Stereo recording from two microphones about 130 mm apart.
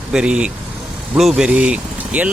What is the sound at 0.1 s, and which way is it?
Speech, 5° right (ahead or behind).